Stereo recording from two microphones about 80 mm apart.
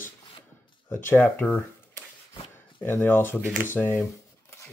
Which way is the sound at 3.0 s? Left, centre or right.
Left.